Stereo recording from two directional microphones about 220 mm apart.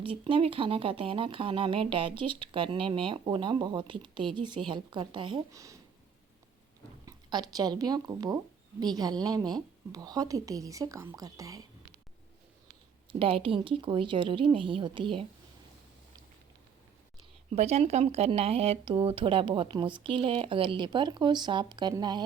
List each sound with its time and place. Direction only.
0.0 s speech: 25° right (ahead or behind)
7.0 s a woman's voice: 20° right (ahead or behind)
13.1 s speech: 25° right (ahead or behind)
17.5 s speech: 30° right (ahead or behind)